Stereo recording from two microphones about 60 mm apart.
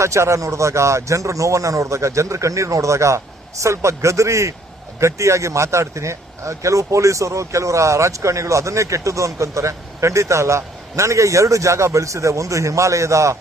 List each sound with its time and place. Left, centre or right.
0.0 s speech: right